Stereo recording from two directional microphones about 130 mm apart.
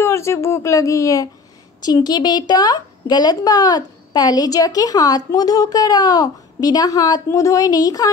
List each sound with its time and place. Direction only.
0.0 s a woman's voice: 20° left (ahead or behind)